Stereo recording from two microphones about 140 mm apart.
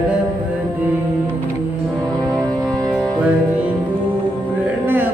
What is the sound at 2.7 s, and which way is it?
Music, 5° left (ahead or behind).